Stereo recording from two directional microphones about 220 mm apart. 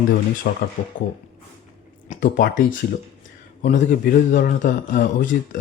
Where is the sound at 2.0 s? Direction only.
35° left (ahead or behind).